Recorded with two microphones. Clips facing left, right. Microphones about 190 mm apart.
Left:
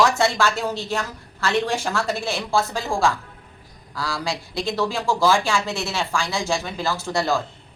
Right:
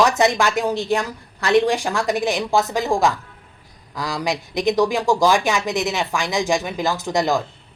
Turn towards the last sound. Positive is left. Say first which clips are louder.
# right 3 dB
turn(degrees=-15)  # may be behind; listen again after turning